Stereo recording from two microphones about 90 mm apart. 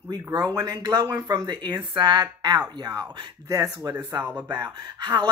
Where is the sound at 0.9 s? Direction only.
45° right (ahead or behind).